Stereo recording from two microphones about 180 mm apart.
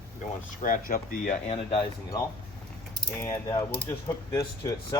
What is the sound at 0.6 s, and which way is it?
Speech, 45° left (ahead or behind).